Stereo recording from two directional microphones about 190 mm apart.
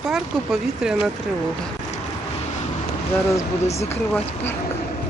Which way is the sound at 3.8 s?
10° left (ahead or behind).